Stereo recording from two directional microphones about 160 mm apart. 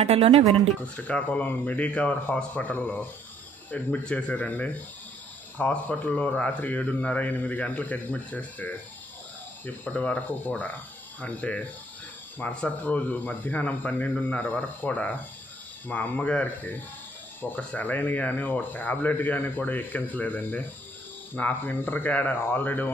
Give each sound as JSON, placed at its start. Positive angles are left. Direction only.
{"t": 0.0, "sound": "speech", "side_deg": -40}
{"t": 0.9, "sound": "speech", "side_deg": 10}